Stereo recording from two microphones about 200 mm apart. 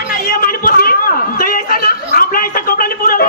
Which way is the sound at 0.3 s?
45° left (ahead or behind).